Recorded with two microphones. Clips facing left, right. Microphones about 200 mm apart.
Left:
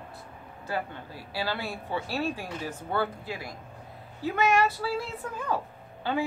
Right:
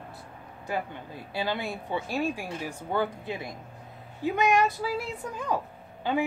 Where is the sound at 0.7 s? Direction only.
20° right (ahead or behind).